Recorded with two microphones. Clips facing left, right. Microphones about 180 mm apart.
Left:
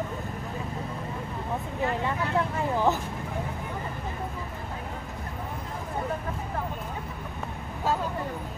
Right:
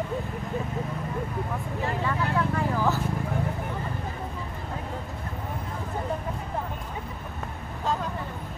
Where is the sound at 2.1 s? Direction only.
20° left (ahead or behind).